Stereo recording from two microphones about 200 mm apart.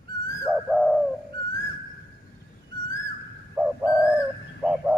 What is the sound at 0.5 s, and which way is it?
Bird, centre (ahead or behind).